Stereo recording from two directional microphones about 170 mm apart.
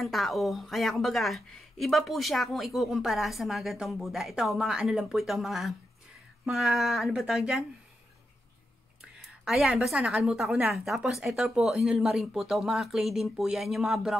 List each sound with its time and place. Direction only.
0.0 s a woman's voice: centre (ahead or behind)
9.4 s a woman's voice: 5° right (ahead or behind)